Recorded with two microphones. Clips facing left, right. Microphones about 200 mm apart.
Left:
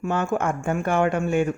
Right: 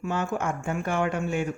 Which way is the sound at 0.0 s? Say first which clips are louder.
Left 4 dB; 50° left (ahead or behind).